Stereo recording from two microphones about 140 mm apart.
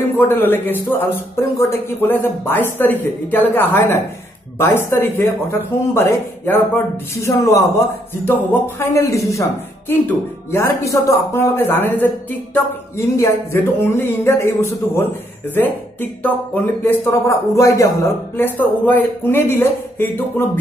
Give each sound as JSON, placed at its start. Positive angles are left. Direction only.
{"t": 0.2, "sound": "speech", "side_deg": 15}